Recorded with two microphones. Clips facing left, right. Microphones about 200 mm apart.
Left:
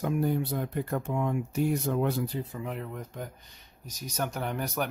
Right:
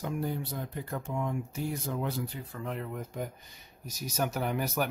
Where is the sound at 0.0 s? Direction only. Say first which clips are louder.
Left 6 dB; 55° left (ahead or behind).